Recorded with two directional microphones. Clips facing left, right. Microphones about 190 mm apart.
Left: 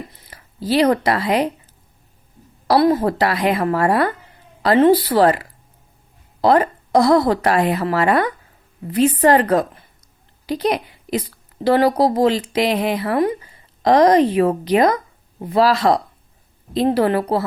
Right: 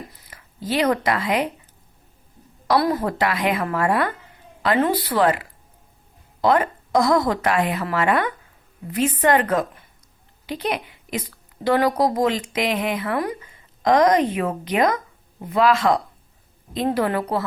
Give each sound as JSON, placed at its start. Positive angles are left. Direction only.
{"t": 0.1, "sound": "speech", "side_deg": 35}
{"t": 2.6, "sound": "a woman's voice", "side_deg": 30}